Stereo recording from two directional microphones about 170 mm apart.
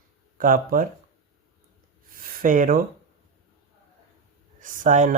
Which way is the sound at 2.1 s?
55° right (ahead or behind).